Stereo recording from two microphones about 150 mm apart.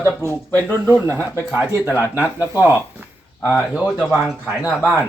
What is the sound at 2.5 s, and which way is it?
Speech, 10° right (ahead or behind).